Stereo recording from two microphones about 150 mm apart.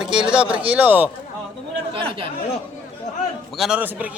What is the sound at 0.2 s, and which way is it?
Speech, 5° right (ahead or behind).